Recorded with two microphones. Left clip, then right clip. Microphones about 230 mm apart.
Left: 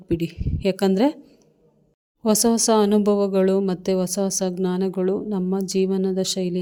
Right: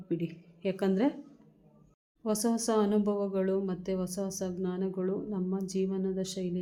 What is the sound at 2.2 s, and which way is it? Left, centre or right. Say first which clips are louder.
Speech: left 12 dB; left.